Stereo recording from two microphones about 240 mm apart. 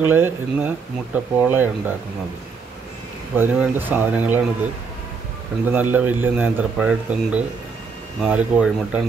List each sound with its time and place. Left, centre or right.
0.0 s speech: centre
3.3 s speech: centre
5.7 s speech: centre